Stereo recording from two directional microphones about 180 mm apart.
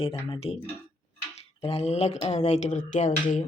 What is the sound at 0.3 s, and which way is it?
Speech, 30° left (ahead or behind).